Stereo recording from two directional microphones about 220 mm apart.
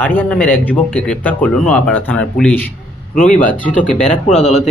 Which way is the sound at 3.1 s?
35° left (ahead or behind).